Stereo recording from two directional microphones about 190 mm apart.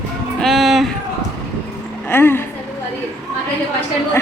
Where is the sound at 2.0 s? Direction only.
10° left (ahead or behind).